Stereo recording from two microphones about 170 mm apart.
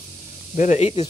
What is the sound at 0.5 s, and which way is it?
Speech, 45° left (ahead or behind).